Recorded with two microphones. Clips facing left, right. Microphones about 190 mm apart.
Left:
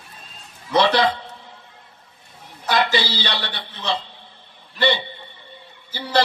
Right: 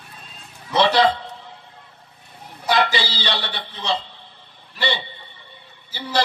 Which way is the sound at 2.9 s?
55° left (ahead or behind).